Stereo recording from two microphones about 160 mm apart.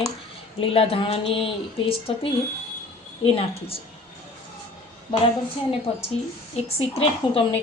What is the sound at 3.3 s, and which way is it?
Speech, 35° left (ahead or behind).